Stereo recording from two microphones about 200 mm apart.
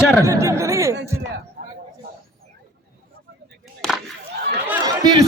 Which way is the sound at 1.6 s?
55° right (ahead or behind).